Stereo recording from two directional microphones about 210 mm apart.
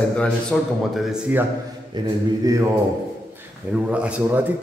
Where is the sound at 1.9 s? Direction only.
20° right (ahead or behind).